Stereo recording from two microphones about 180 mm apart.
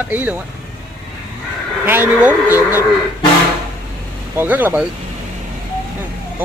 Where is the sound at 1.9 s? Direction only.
10° right (ahead or behind).